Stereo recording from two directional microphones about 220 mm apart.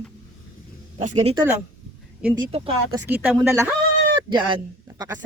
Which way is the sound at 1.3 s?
10° right (ahead or behind).